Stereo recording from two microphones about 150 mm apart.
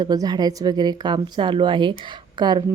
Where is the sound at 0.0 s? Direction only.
25° right (ahead or behind).